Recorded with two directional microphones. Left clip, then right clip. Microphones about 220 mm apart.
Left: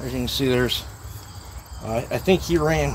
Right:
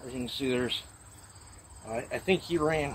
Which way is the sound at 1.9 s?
15° left (ahead or behind).